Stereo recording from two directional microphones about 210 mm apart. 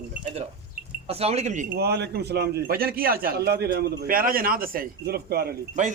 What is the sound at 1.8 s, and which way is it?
A man's voice, 50° right (ahead or behind).